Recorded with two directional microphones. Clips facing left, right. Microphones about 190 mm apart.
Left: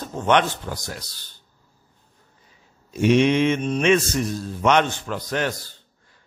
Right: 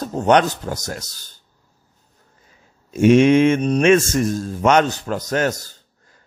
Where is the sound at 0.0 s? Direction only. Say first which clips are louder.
Right 4 dB; 40° right (ahead or behind).